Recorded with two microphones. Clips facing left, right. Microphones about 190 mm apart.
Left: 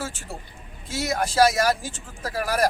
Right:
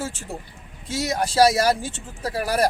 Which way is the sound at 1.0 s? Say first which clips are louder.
Right 2 dB; 35° right (ahead or behind).